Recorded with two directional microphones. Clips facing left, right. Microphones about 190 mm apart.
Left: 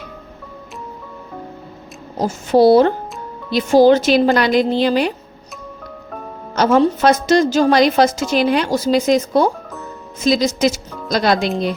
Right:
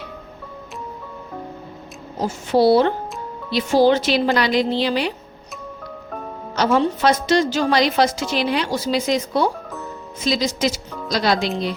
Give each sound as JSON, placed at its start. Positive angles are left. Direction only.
{"t": 2.1, "sound": "speech", "side_deg": 45}
{"t": 6.6, "sound": "speech", "side_deg": 45}